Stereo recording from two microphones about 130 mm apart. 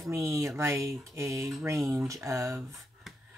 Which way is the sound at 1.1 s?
25° right (ahead or behind).